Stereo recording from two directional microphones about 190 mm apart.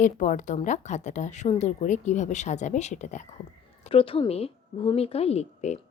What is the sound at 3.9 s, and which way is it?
Speech, 30° left (ahead or behind).